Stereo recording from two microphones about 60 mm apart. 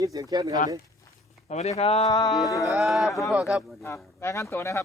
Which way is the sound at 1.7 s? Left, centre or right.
Left.